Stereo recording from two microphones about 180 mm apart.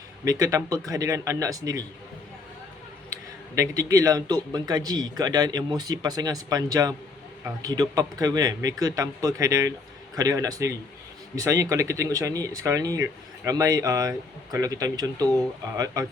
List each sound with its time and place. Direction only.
0.3 s speech: 20° right (ahead or behind)
3.1 s a man's voice: 15° right (ahead or behind)